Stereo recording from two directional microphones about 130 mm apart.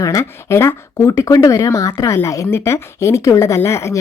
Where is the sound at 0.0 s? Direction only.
25° left (ahead or behind).